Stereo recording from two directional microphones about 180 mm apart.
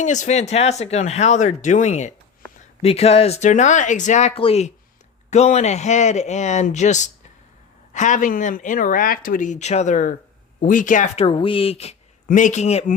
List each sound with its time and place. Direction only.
0.0 s speech: 40° left (ahead or behind)